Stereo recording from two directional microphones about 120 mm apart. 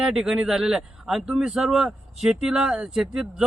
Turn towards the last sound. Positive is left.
turn(degrees=-5)  # may be behind; listen again after turning